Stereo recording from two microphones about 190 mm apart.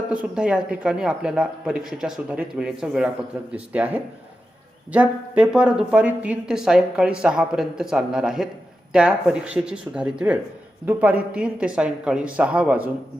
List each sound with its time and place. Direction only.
0.1 s a woman's voice: 5° right (ahead or behind)